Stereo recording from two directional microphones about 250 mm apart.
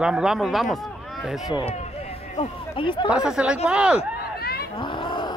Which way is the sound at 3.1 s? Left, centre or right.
Centre.